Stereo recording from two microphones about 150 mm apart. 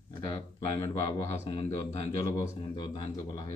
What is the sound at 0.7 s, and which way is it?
Speech, 20° left (ahead or behind).